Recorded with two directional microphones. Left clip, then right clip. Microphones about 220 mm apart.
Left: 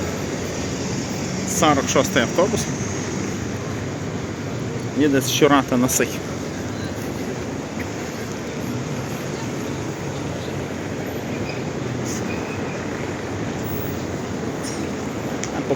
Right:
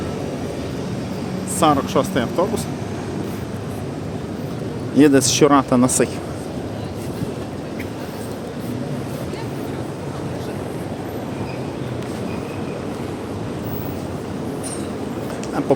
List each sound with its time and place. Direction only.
1.6 s speech: 10° right (ahead or behind)
4.9 s speech: 35° right (ahead or behind)
5.4 s speech: 15° right (ahead or behind)